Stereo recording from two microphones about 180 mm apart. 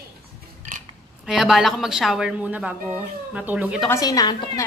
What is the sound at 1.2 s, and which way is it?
A woman's voice, centre (ahead or behind).